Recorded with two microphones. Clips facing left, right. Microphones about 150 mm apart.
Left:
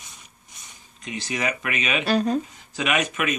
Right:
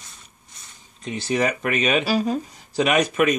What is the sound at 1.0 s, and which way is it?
Speech, 30° right (ahead or behind).